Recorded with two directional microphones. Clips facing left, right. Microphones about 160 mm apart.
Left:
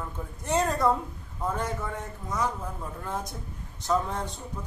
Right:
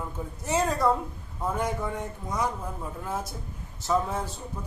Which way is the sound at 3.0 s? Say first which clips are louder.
Even; 5° right (ahead or behind).